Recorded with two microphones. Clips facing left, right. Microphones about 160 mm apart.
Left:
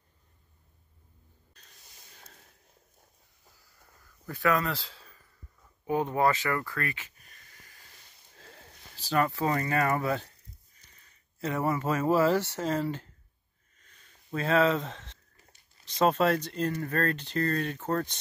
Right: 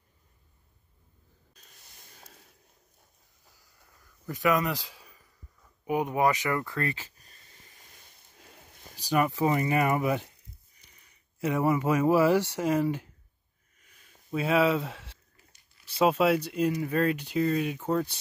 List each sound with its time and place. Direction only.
4.3 s a man's voice: 15° right (ahead or behind); by 7.7 s 35° right (ahead or behind)
8.4 s a sound: 15° right (ahead or behind)
15.9 s speech: 10° right (ahead or behind)